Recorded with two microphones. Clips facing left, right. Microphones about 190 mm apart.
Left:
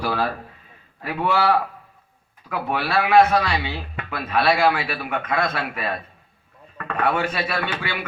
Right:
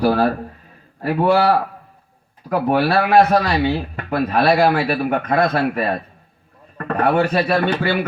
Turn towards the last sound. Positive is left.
turn(degrees=-40)  # may be behind; listen again after turning